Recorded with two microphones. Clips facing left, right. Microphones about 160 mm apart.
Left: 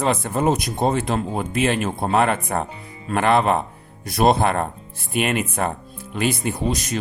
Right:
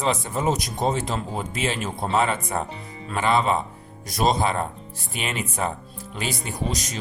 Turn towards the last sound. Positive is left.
turn(degrees=60)  # may be behind; listen again after turning